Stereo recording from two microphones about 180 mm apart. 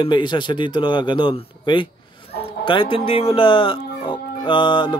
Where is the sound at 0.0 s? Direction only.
25° left (ahead or behind).